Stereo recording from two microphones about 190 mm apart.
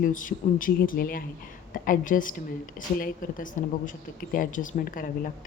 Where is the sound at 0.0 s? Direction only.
45° left (ahead or behind).